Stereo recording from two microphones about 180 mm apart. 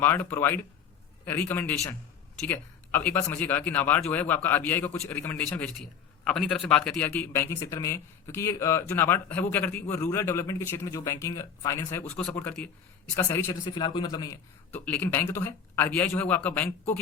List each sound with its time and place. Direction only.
0.0 s speech: 10° left (ahead or behind)
13.7 s a man's voice: 25° left (ahead or behind)
14.7 s speech: 10° left (ahead or behind)